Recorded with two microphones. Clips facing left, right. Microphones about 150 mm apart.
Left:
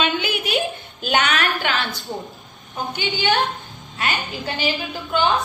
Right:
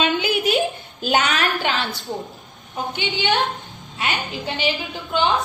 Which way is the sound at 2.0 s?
Centre (ahead or behind).